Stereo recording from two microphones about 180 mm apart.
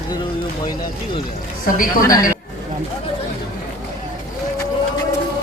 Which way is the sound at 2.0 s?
20° left (ahead or behind).